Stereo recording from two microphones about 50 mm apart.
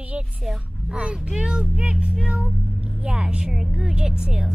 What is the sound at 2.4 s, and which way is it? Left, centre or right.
A woman's voice, right.